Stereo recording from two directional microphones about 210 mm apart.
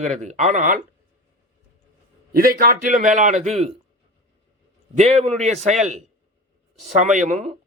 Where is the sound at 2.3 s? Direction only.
45° right (ahead or behind).